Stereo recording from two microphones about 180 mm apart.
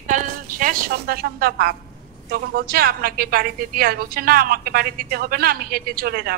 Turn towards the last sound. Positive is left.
turn(degrees=-60)  # may be behind; listen again after turning